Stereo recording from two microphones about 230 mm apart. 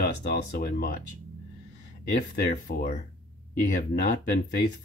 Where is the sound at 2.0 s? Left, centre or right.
Left.